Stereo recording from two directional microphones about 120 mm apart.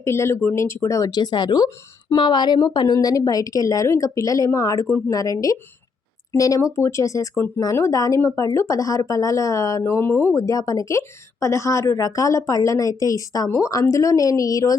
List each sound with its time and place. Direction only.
0.0 s speech: 20° left (ahead or behind)